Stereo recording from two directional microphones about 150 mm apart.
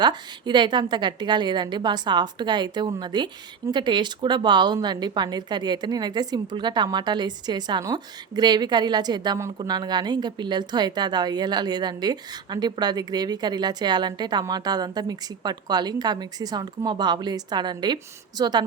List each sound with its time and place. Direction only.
0.0 s a woman's voice: 30° right (ahead or behind)